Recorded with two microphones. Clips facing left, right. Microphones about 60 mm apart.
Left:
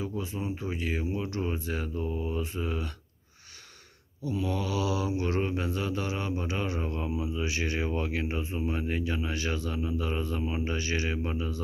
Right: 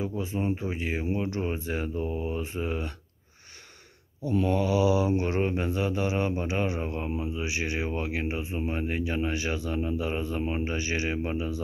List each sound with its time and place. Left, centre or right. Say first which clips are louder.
0.0 s mantra: right 4 dB; right
4.3 s mantra: right 5 dB; right
4.6 s mantra: right 6 dB; right